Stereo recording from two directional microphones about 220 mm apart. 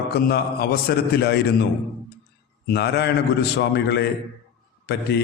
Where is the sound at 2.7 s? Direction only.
45° left (ahead or behind).